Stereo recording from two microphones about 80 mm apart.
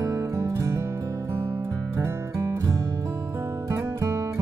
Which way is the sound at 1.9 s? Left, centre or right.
Right.